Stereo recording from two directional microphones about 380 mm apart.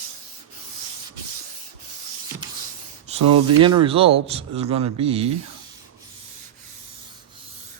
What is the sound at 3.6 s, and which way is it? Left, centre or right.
A man's voice, centre.